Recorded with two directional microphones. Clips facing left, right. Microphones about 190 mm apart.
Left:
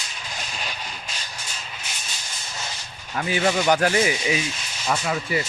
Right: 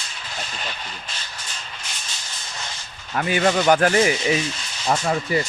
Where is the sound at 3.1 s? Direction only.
60° right (ahead or behind).